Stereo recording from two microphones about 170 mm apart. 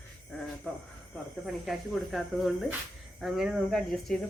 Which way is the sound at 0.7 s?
5° left (ahead or behind).